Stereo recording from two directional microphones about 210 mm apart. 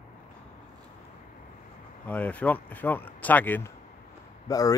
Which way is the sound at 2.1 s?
5° left (ahead or behind).